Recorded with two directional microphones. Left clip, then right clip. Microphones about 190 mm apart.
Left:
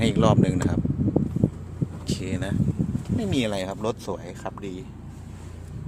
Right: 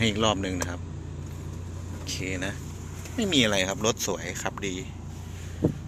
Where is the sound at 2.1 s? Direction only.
25° left (ahead or behind).